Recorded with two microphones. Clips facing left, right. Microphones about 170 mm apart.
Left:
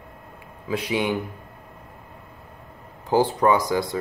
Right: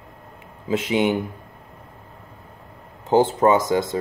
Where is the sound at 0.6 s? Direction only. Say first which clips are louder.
Right 4 dB; 25° right (ahead or behind).